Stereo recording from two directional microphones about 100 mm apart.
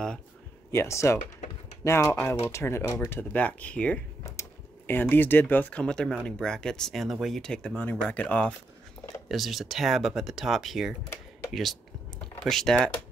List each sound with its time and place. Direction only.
0.7 s speech: 30° left (ahead or behind)
2.5 s speech: 30° left (ahead or behind); by 7.7 s 5° left (ahead or behind)
7.7 s speech: 15° left (ahead or behind)
9.3 s speech: centre (ahead or behind)